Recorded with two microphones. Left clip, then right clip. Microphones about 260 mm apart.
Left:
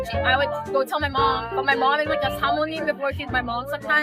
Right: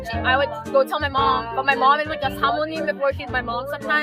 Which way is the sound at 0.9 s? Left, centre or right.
Centre.